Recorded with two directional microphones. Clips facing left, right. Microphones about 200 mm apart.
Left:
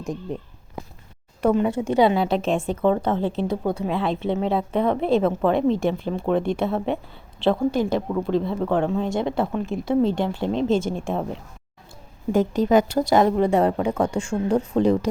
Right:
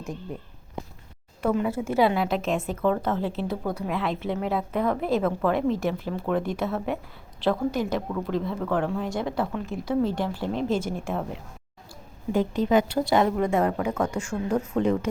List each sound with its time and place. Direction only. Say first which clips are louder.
1.9 s a woman's voice: left 3 dB; 25° left (ahead or behind)
12.3 s a woman's voice: left 4 dB; 45° left (ahead or behind)